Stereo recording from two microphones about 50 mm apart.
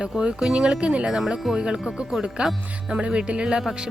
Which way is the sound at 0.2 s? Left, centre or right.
Centre.